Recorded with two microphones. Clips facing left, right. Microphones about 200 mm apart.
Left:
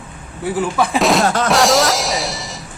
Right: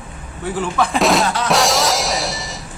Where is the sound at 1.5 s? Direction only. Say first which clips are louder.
Left 2 dB; centre (ahead or behind).